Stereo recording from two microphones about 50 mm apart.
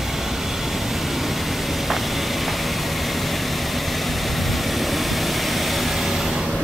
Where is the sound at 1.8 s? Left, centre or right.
Centre.